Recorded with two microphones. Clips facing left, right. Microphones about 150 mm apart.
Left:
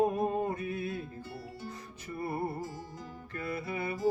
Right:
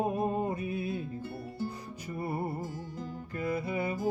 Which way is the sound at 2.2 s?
15° right (ahead or behind).